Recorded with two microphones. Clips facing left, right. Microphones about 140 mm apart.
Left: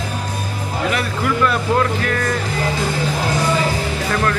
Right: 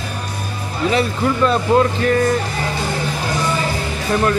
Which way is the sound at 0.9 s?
30° right (ahead or behind).